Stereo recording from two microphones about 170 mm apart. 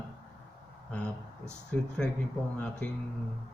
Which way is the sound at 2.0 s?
5° left (ahead or behind).